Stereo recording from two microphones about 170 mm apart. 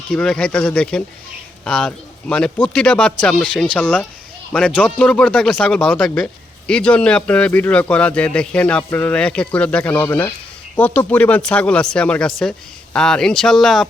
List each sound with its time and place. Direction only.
0.1 s speech: 5° left (ahead or behind)